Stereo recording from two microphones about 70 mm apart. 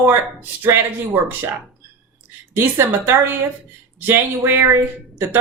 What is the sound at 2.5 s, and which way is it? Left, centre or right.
Speech, right.